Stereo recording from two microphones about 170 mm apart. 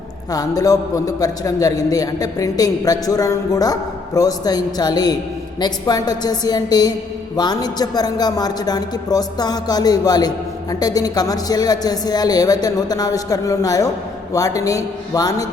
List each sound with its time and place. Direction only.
0.3 s speech: 20° left (ahead or behind)